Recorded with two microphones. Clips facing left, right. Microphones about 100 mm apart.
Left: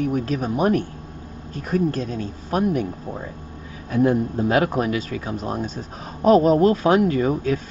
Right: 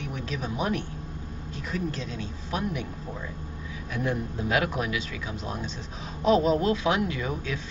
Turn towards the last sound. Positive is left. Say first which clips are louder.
# left 11 dB
turn(degrees=45)  # may be behind; listen again after turning